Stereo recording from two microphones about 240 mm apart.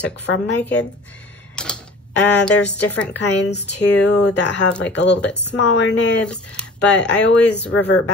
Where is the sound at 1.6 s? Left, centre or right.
Centre.